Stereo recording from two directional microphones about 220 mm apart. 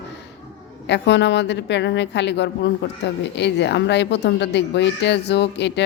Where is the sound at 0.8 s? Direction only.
50° left (ahead or behind).